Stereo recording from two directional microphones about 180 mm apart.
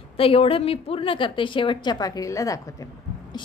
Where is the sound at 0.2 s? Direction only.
30° left (ahead or behind).